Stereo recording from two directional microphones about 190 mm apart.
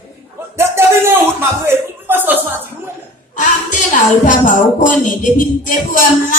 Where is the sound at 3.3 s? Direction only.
40° left (ahead or behind).